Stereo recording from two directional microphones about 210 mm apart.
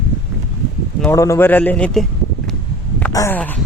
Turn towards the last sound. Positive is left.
turn(degrees=10)  # may be behind; listen again after turning